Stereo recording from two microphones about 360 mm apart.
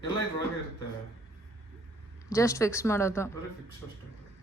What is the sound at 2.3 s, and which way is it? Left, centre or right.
Speech, centre.